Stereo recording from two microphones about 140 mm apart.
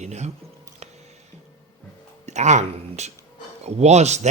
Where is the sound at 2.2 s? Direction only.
55° right (ahead or behind).